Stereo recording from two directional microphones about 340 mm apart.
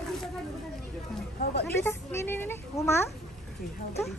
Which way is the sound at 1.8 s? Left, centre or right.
Centre.